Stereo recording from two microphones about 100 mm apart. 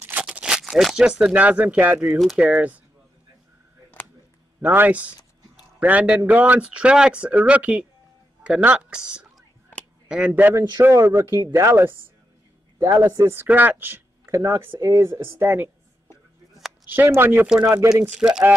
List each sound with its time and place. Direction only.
0.0 s a man's voice: 15° right (ahead or behind)
4.0 s a sound: 20° left (ahead or behind)
4.6 s a man's voice: 15° right (ahead or behind)
10.6 s a man's voice: 20° right (ahead or behind)
14.2 s speech: 30° right (ahead or behind)
16.9 s speech: 20° right (ahead or behind)
18.0 s a man's voice: 10° right (ahead or behind)